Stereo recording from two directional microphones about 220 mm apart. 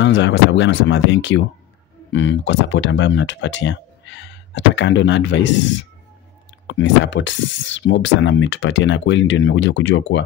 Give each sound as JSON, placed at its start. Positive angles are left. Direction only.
{"t": 0.0, "sound": "speech", "side_deg": 55}